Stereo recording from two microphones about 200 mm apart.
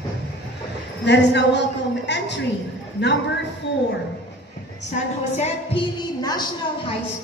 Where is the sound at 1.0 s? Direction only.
60° left (ahead or behind).